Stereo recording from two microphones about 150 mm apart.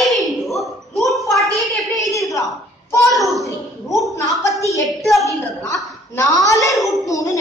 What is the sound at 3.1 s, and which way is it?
Speech, centre (ahead or behind).